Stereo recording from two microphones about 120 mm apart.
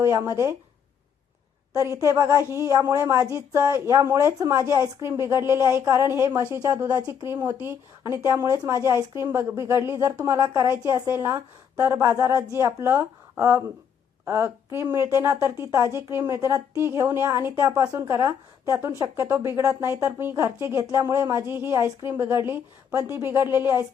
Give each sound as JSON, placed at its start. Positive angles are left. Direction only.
{"t": 0.0, "sound": "speech", "side_deg": -25}
{"t": 1.7, "sound": "speech", "side_deg": -25}
{"t": 7.3, "sound": "speech", "side_deg": -20}